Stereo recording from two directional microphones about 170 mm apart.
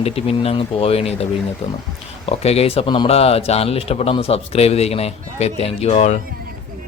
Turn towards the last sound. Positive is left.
turn(degrees=40)  # may be behind; listen again after turning